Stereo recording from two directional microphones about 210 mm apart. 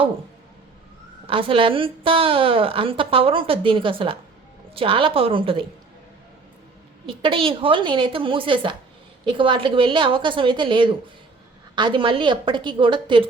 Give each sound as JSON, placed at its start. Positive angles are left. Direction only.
{"t": 1.3, "sound": "a woman's voice", "side_deg": -25}
{"t": 7.1, "sound": "a woman's voice", "side_deg": -25}